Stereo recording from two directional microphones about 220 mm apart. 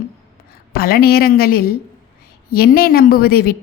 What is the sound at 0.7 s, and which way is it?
A woman's voice, 45° left (ahead or behind).